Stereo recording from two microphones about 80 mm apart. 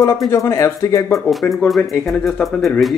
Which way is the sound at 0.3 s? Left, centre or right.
Left.